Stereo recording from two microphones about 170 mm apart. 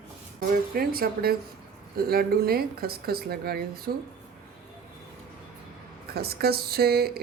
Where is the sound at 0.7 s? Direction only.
60° right (ahead or behind).